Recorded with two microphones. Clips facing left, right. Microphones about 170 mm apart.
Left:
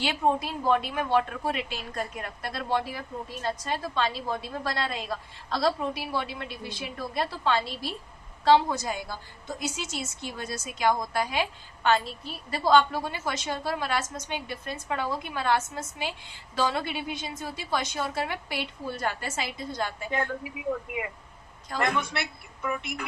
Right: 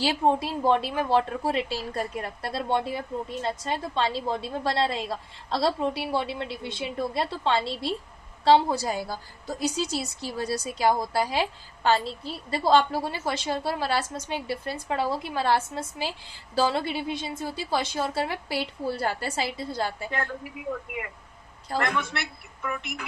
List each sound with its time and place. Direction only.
0.0 s a woman's voice: 30° right (ahead or behind)
21.7 s a woman's voice: 30° right (ahead or behind)